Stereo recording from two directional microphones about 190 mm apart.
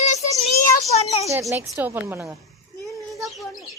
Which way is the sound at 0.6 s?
35° left (ahead or behind).